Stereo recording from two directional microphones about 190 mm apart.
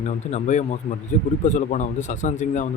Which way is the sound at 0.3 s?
40° left (ahead or behind).